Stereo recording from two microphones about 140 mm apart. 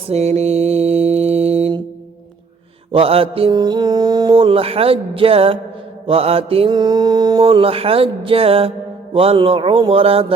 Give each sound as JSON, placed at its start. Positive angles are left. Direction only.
{"t": 0.1, "sound": "mantra", "side_deg": -50}
{"t": 2.9, "sound": "mantra", "side_deg": -40}
{"t": 3.5, "sound": "speech", "side_deg": -30}
{"t": 6.1, "sound": "mantra", "side_deg": -45}
{"t": 6.7, "sound": "a sound", "side_deg": -30}
{"t": 7.4, "sound": "speech", "side_deg": -40}